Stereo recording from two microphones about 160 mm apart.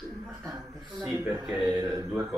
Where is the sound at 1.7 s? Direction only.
20° right (ahead or behind).